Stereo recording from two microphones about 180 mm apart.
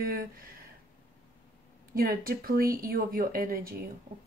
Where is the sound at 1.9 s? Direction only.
55° right (ahead or behind).